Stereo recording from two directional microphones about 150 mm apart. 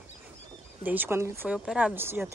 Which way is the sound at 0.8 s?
15° right (ahead or behind).